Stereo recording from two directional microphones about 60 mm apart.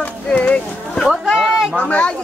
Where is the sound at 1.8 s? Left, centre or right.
Left.